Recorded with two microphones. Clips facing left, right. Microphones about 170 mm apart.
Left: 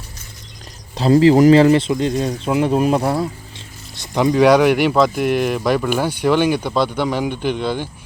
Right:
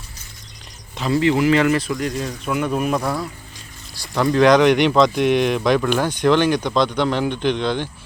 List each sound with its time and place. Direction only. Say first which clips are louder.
0.9 s speech: left 7 dB; 35° left (ahead or behind)
4.3 s speech: left 1 dB; 10° left (ahead or behind)